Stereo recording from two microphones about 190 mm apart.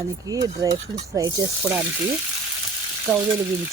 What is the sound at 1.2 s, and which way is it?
Speech, 20° right (ahead or behind).